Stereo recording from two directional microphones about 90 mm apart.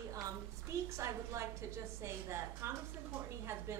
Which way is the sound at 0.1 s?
35° right (ahead or behind).